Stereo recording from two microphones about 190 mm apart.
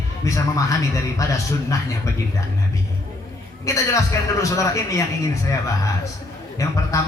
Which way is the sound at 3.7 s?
15° left (ahead or behind).